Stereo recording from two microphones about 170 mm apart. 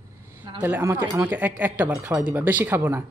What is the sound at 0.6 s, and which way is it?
A woman's voice, 15° right (ahead or behind).